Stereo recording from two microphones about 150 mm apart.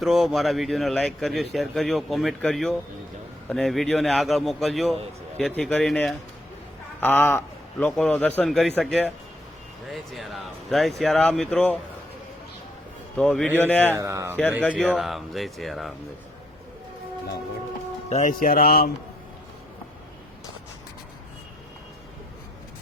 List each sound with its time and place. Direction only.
0.0 s a man's voice: centre (ahead or behind)
13.1 s a man's voice: 5° left (ahead or behind)
13.9 s speech: 20° right (ahead or behind)
14.6 s a man's voice: 10° left (ahead or behind)
14.8 s speech: centre (ahead or behind)
18.1 s speech: 55° left (ahead or behind); by 18.9 s 90° left